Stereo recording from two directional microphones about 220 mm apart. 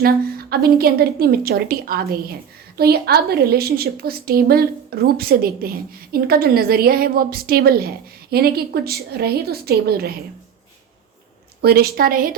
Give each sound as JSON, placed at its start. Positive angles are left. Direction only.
{"t": 0.5, "sound": "a woman's voice", "side_deg": -45}
{"t": 11.6, "sound": "a woman's voice", "side_deg": -45}